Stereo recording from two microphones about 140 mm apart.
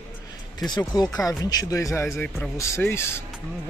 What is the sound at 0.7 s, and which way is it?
Speech, 30° left (ahead or behind).